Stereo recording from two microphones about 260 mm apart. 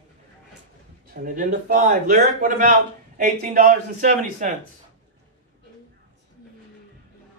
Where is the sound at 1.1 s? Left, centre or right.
Right.